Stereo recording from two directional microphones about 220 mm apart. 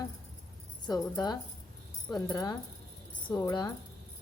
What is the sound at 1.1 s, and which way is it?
A woman's voice, 20° left (ahead or behind).